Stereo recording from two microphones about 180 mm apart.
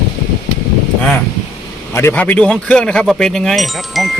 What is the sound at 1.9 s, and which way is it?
Speech, 15° left (ahead or behind).